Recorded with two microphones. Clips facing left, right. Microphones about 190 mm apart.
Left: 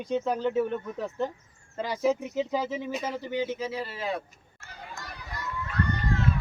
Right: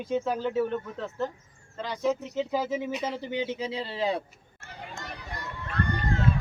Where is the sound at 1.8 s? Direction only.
10° left (ahead or behind).